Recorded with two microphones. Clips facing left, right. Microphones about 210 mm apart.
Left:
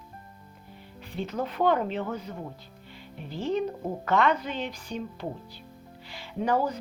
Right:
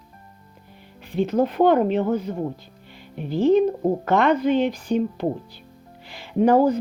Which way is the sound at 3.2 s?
70° right (ahead or behind).